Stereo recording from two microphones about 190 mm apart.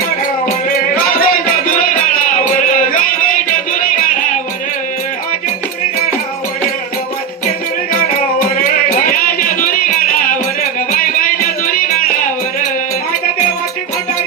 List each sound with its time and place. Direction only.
1.1 s music: 50° left (ahead or behind)
8.4 s music: 50° left (ahead or behind)